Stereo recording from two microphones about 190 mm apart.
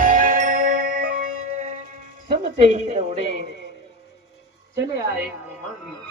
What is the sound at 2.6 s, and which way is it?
Speech, 35° right (ahead or behind).